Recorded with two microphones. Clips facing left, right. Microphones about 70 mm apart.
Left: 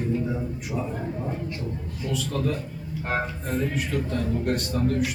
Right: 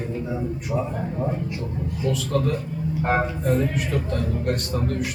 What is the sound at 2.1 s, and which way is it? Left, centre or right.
A man's voice, centre.